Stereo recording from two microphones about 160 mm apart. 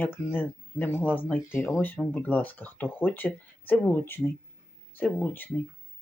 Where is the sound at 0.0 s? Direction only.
10° left (ahead or behind).